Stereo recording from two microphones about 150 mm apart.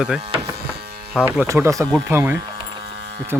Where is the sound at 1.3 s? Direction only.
15° right (ahead or behind).